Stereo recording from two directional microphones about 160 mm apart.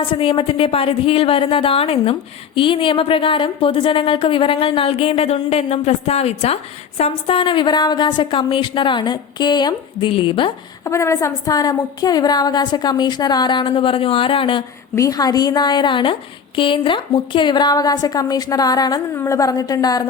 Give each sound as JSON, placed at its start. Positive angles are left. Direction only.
{"t": 0.1, "sound": "a woman's voice", "side_deg": 30}
{"t": 10.8, "sound": "a woman's voice", "side_deg": 20}
{"t": 14.9, "sound": "a woman's voice", "side_deg": 20}